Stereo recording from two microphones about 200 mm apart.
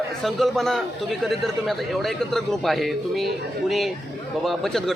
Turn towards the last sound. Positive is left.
turn(degrees=0)  # may be behind; listen again after turning